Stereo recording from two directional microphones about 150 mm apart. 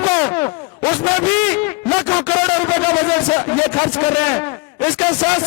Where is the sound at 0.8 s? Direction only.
10° left (ahead or behind).